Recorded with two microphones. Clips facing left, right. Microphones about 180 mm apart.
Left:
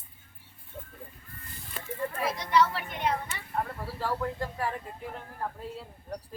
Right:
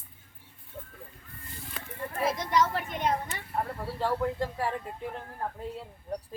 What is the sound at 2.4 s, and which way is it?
Speech, 45° right (ahead or behind).